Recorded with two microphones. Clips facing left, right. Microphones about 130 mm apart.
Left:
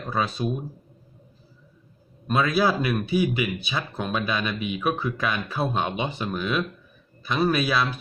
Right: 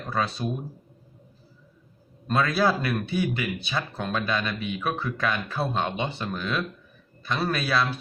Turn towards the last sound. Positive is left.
turn(degrees=10)  # may be behind; listen again after turning